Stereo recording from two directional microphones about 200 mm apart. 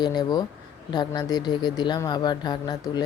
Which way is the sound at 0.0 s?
20° left (ahead or behind).